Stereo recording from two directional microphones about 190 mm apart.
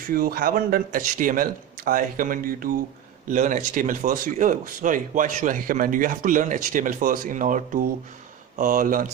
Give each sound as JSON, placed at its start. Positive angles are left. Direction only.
{"t": 0.1, "sound": "speech", "side_deg": -50}